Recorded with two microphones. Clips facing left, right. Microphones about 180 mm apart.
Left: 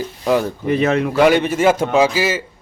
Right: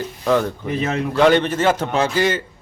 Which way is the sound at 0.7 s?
65° left (ahead or behind).